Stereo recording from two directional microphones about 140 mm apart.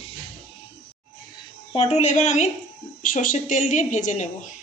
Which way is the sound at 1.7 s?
50° left (ahead or behind).